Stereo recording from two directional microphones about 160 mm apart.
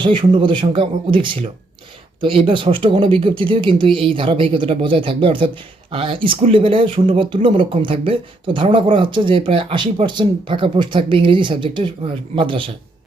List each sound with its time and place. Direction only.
0.0 s speech: 30° right (ahead or behind)